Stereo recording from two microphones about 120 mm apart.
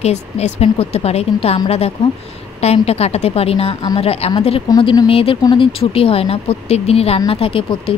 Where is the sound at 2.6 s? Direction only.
60° left (ahead or behind).